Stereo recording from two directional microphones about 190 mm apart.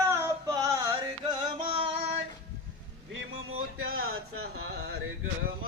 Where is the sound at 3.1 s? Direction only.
85° right.